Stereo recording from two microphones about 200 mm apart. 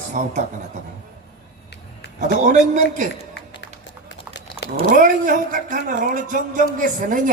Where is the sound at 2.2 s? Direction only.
40° right (ahead or behind).